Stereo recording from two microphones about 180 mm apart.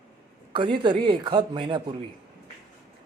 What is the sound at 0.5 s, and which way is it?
Speech, 25° right (ahead or behind).